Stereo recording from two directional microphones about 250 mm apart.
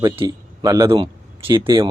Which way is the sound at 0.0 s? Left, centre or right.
Centre.